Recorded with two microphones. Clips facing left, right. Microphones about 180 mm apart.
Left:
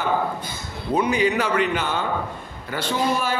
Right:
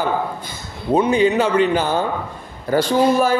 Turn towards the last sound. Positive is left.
turn(degrees=-40)  # may be behind; listen again after turning